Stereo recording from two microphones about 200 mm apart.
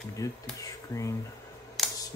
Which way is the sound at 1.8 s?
Centre (ahead or behind).